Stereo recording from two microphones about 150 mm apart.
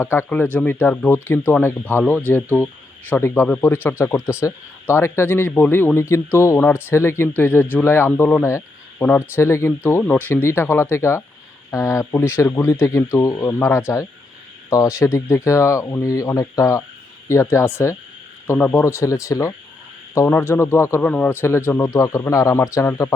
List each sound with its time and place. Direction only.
0.0 s speech: 15° left (ahead or behind)